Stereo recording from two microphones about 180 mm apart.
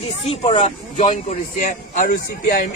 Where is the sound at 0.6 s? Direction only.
40° left (ahead or behind).